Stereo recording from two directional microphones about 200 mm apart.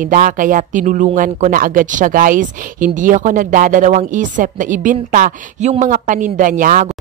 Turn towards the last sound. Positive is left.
turn(degrees=-40)  # may be behind; listen again after turning